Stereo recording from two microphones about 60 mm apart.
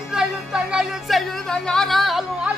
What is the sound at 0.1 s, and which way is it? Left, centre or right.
Music, centre.